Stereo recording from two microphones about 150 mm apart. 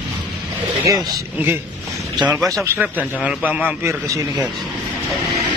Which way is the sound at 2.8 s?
10° right (ahead or behind).